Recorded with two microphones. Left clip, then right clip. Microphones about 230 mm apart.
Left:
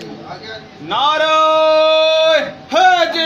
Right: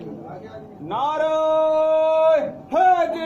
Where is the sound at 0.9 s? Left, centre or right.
Left.